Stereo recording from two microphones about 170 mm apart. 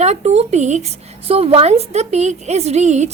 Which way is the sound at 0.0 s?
40° right (ahead or behind).